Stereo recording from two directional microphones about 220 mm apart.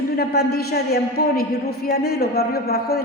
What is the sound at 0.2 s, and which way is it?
A woman's voice, 45° left (ahead or behind).